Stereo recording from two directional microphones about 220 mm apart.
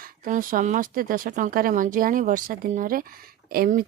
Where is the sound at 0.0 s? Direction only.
40° right (ahead or behind).